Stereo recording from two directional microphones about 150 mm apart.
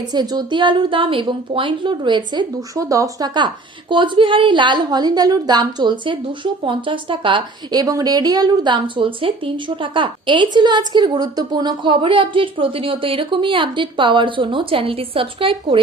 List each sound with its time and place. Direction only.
0.0 s a woman's voice: 30° right (ahead or behind)